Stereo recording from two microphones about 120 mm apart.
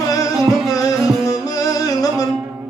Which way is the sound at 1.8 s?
30° left (ahead or behind).